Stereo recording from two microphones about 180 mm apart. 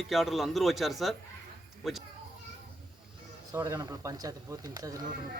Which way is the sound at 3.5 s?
15° right (ahead or behind).